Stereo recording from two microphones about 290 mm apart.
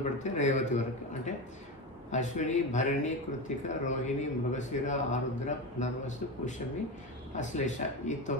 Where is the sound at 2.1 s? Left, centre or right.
Left.